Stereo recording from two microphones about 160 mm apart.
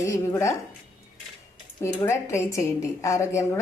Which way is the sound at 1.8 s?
15° left (ahead or behind).